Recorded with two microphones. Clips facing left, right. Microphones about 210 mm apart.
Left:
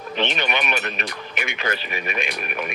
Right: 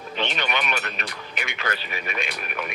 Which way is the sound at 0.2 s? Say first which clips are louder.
Left 3 dB; 20° left (ahead or behind).